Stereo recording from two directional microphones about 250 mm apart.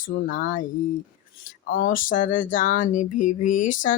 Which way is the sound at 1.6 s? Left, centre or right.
Left.